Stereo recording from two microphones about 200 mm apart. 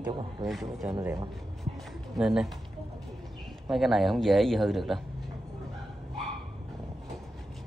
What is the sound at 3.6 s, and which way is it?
A man's voice, centre (ahead or behind).